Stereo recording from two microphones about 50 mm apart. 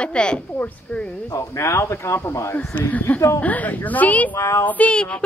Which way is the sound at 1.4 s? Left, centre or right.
Left.